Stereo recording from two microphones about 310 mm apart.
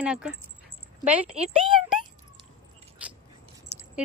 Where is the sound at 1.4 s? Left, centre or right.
Centre.